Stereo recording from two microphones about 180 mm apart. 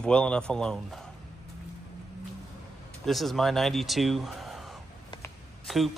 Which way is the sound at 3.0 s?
Centre (ahead or behind).